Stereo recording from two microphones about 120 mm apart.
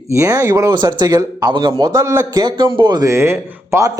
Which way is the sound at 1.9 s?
25° right (ahead or behind).